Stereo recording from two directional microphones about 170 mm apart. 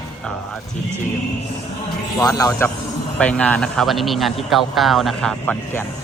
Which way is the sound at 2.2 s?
20° left (ahead or behind).